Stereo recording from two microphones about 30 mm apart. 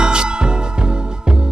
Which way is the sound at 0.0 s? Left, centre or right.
Right.